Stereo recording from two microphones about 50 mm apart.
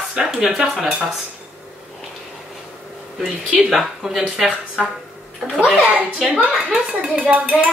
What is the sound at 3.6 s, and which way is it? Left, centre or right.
Speech, centre.